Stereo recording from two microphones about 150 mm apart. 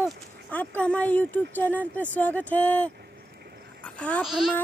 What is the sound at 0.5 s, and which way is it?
Speech, 10° left (ahead or behind).